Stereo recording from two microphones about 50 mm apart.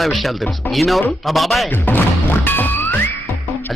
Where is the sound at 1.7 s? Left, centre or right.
Left.